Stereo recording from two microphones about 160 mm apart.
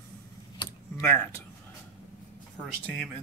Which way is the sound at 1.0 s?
10° left (ahead or behind).